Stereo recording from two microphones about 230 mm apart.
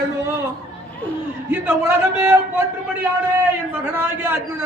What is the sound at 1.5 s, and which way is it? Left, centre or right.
A man's voice, centre.